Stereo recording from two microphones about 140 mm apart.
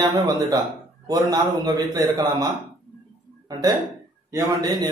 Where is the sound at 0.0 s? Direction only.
25° right (ahead or behind).